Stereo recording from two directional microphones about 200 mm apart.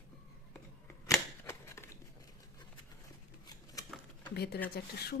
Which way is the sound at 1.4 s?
15° left (ahead or behind).